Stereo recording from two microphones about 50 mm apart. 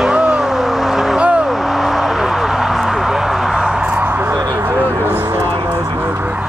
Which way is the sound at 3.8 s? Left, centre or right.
Right.